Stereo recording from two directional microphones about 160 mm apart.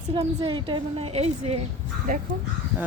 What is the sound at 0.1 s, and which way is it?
A woman's voice, 35° right (ahead or behind).